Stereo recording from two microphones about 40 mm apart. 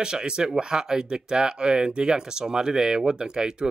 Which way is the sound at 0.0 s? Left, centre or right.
Centre.